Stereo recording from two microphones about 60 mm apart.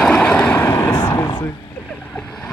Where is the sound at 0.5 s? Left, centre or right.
Left.